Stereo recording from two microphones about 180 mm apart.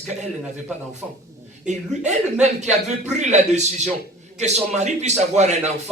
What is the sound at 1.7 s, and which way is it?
A man's voice, 40° right (ahead or behind).